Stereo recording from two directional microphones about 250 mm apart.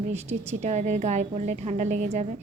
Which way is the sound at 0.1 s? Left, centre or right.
Right.